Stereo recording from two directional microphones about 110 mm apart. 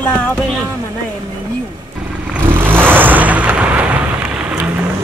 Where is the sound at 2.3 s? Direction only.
20° right (ahead or behind).